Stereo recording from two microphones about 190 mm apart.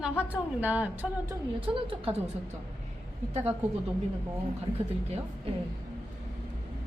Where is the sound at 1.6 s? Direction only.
30° right (ahead or behind).